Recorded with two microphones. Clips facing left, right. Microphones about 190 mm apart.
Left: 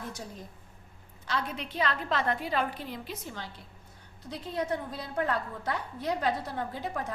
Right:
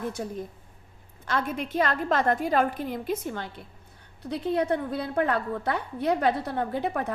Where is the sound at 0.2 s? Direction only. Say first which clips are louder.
Right 9 dB; 60° right (ahead or behind).